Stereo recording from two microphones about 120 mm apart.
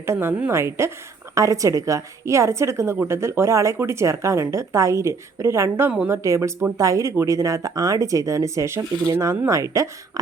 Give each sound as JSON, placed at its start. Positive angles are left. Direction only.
{"t": 0.0, "sound": "a woman's voice", "side_deg": -20}